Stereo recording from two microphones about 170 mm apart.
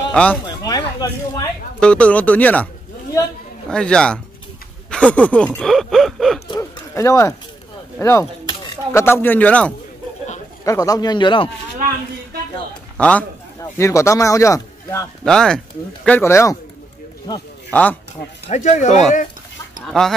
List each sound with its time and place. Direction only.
0.1 s speech: 5° left (ahead or behind)
0.5 s a sound: 25° left (ahead or behind)
1.8 s speech: 5° left (ahead or behind)
3.7 s speech: 5° left (ahead or behind)
4.9 s gasp: 5° left (ahead or behind)
6.6 s a sound: 15° left (ahead or behind)
8.0 s speech: 15° left (ahead or behind)
10.6 s speech: 20° left (ahead or behind)
12.9 s a man's voice: 5° left (ahead or behind)
13.6 s speech: 15° left (ahead or behind)
15.2 s speech: 5° left (ahead or behind); by 17.4 s 20° left (ahead or behind)
17.6 s speech: 10° left (ahead or behind)
18.5 s speech: 45° left (ahead or behind)
19.9 s speech: 5° left (ahead or behind)